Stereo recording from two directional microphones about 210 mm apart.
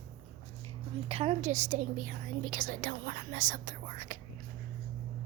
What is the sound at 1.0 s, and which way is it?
Speech, 30° right (ahead or behind).